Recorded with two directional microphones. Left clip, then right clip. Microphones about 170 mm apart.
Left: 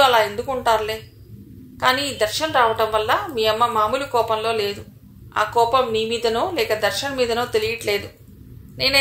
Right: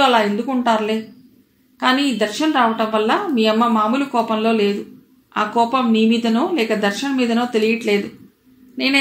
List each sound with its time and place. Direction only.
0.0 s a woman's voice: 35° left (ahead or behind)